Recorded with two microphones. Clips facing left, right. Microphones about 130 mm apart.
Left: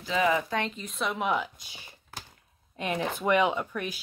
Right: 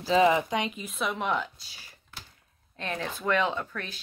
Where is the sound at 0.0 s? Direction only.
30° right (ahead or behind).